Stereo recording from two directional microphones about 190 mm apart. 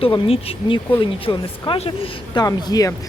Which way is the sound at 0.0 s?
30° left (ahead or behind).